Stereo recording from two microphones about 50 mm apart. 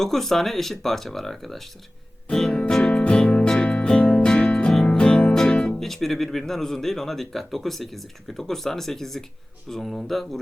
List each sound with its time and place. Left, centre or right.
0.0 s speech: centre
2.3 s music: centre
5.8 s speech: centre